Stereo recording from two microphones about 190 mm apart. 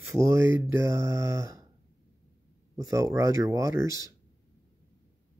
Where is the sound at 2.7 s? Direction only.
15° right (ahead or behind).